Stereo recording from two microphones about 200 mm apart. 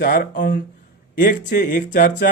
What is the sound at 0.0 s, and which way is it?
Speech, 45° left (ahead or behind).